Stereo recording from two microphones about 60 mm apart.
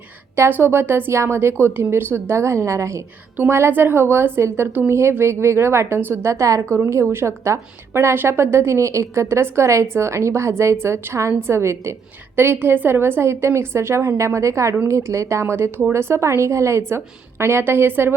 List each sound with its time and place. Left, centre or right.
0.5 s speech: right
3.3 s speech: right
4.9 s speech: right
6.2 s speech: right
6.7 s speech: right
8.1 s speech: right
12.4 s speech: right